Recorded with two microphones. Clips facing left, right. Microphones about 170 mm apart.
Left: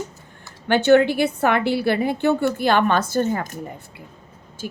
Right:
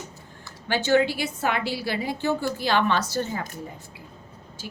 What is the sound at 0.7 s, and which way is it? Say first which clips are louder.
A woman's voice: left 6 dB; 60° left (ahead or behind).